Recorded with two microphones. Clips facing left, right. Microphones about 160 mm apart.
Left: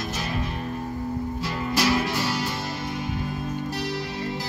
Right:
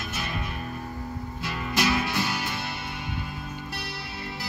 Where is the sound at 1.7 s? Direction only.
40° left (ahead or behind).